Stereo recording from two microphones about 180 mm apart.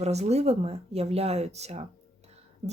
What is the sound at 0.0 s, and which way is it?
Speech, 35° right (ahead or behind).